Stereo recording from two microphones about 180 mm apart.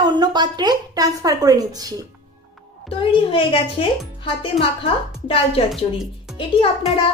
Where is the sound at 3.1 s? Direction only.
30° left (ahead or behind).